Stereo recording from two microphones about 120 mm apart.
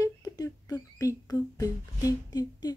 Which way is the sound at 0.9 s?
30° left (ahead or behind).